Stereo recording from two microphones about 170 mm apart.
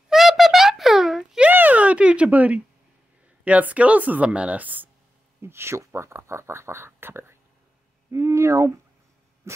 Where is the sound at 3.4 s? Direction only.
10° right (ahead or behind).